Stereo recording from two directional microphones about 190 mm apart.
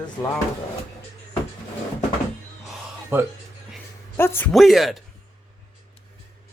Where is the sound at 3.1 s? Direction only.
10° right (ahead or behind).